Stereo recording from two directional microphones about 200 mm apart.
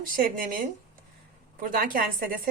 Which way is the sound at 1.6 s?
45° right (ahead or behind).